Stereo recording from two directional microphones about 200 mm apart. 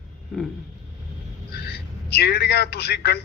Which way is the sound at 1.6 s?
55° left (ahead or behind).